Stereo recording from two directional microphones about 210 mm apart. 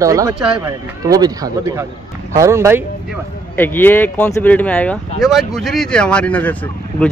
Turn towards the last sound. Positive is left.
turn(degrees=5)  # may be behind; listen again after turning